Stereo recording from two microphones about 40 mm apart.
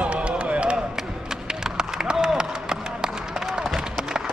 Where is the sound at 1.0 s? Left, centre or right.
Centre.